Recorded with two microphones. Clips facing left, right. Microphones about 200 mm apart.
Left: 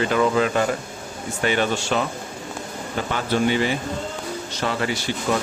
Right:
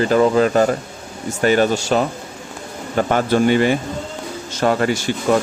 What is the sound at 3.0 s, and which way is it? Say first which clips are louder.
Speech: right 5 dB; 50° right (ahead or behind).